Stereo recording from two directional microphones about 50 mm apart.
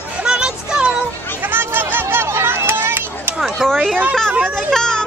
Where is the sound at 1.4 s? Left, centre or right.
Right.